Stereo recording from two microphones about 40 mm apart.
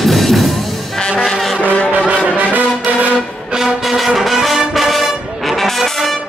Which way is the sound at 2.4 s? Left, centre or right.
Right.